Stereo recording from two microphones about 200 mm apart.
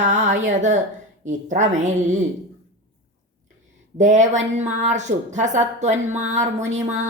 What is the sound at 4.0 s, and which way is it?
A woman's voice, 35° right (ahead or behind).